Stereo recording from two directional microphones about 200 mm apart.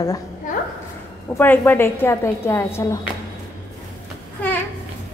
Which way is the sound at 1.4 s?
10° left (ahead or behind).